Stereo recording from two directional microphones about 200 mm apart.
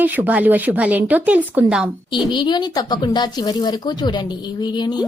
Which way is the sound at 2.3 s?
20° left (ahead or behind).